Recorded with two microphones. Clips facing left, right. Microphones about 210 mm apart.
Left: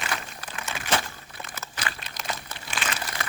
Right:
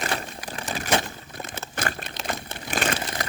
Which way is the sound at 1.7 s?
45° right (ahead or behind).